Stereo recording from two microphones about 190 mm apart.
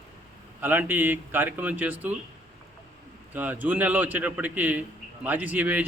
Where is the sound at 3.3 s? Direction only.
10° right (ahead or behind).